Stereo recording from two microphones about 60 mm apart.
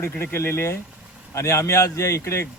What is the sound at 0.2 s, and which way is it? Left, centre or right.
Speech, left.